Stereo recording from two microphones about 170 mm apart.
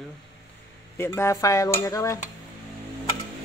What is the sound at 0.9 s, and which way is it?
Speech, 15° left (ahead or behind).